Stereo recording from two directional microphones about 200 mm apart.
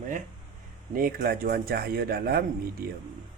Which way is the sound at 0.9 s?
45° right (ahead or behind).